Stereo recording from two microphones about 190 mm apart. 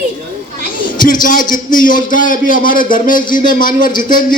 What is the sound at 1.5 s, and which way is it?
Speech, 45° left (ahead or behind).